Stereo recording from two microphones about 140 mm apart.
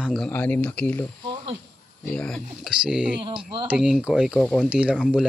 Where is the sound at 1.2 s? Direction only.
35° right (ahead or behind).